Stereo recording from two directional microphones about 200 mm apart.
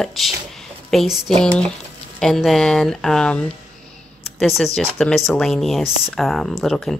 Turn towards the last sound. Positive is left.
turn(degrees=0)  # may be behind; listen again after turning